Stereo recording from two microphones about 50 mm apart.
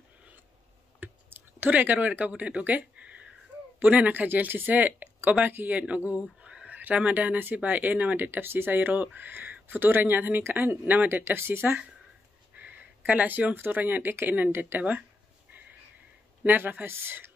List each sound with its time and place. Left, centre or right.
0.9 s clicking: right
3.8 s speech: right
5.8 s speech: right
6.4 s a sound: right
6.7 s speech: right
8.3 s speech: right
12.5 s a sound: right
13.7 s speech: right
14.8 s speech: right
16.4 s speech: right